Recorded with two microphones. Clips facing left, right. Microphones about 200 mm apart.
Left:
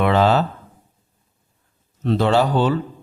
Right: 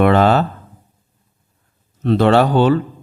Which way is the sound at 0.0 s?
55° right (ahead or behind).